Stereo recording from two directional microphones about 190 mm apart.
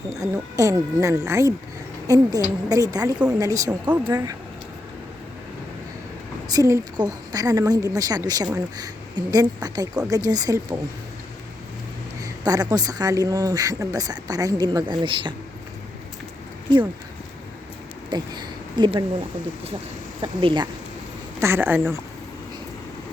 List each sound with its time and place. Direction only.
0.1 s speech: 20° right (ahead or behind)
6.5 s speech: 20° right (ahead or behind)
12.2 s speech: 20° right (ahead or behind)
18.1 s speech: 25° right (ahead or behind)
20.2 s speech: 25° right (ahead or behind)
21.4 s speech: 10° right (ahead or behind)